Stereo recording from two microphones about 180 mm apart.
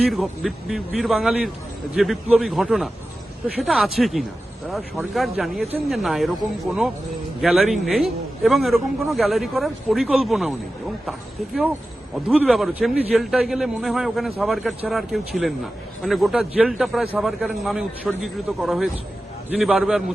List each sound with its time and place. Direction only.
0.0 s a man's voice: centre (ahead or behind)
12.1 s a man's voice: 5° right (ahead or behind)